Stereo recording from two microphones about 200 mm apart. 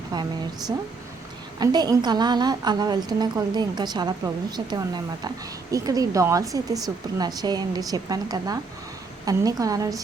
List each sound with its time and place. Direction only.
1.5 s a woman's voice: 20° right (ahead or behind)